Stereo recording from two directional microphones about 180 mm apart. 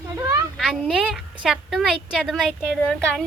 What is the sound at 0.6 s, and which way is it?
A woman's voice, centre (ahead or behind).